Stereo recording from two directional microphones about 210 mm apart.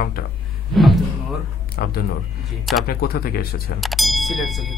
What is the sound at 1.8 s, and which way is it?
Speech, 45° left (ahead or behind).